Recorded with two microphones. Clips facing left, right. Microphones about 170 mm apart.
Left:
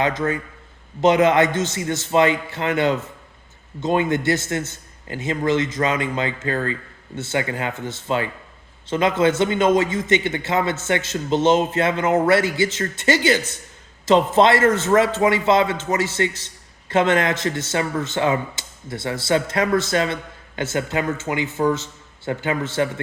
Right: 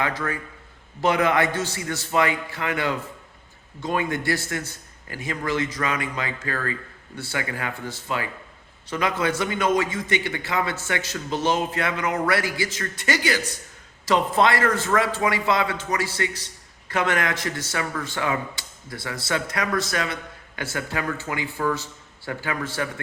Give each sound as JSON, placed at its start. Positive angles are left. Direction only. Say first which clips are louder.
{"t": 0.0, "sound": "a man's voice", "louder": "left 5 dB", "side_deg": 20}